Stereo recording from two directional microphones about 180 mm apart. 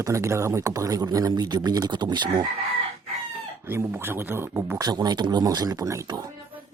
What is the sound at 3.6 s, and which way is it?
A man's voice, 15° right (ahead or behind).